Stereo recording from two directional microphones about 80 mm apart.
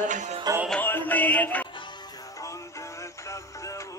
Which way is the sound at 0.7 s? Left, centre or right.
Left.